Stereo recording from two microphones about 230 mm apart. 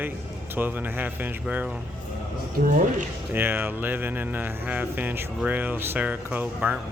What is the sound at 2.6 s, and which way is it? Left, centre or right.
Speech, right.